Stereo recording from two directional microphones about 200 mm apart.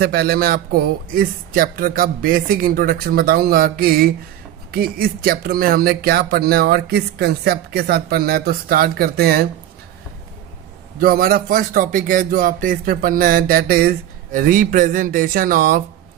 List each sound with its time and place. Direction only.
0.0 s speech: 50° right (ahead or behind)
11.0 s speech: 45° right (ahead or behind)